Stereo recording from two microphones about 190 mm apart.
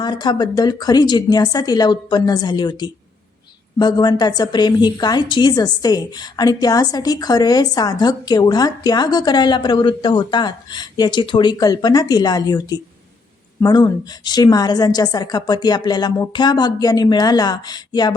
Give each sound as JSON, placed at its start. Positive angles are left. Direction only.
{"t": 0.0, "sound": "a woman's voice", "side_deg": 20}